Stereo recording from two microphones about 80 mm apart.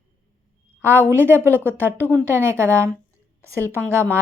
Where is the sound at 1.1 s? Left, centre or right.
Right.